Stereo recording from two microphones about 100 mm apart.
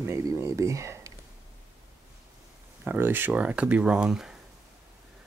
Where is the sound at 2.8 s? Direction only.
20° right (ahead or behind).